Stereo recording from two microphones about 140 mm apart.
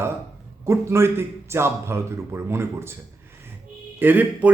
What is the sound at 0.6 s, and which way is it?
Speech, 20° right (ahead or behind).